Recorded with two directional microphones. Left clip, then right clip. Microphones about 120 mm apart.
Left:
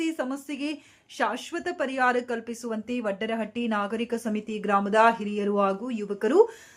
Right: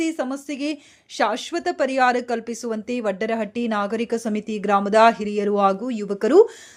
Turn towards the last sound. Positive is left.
turn(degrees=-40)  # may be behind; listen again after turning